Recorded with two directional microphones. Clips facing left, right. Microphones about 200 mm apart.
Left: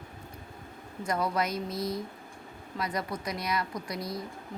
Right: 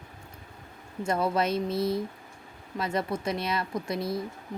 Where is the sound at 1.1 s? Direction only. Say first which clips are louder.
Right 3 dB; 25° right (ahead or behind).